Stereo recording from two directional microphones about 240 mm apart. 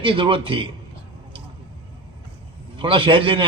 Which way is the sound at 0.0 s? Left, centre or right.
Right.